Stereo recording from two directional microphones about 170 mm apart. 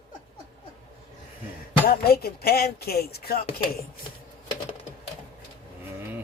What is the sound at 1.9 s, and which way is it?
Speech, 65° left (ahead or behind).